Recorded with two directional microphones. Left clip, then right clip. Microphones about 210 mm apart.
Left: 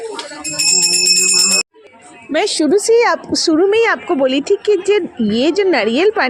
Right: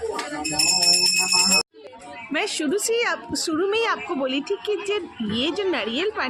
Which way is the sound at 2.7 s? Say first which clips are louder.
Left 12 dB; 15° left (ahead or behind).